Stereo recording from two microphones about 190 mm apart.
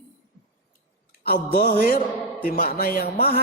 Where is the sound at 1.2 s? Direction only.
50° left (ahead or behind).